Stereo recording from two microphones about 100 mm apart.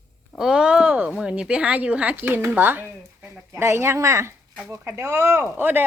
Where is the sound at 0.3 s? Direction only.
5° right (ahead or behind).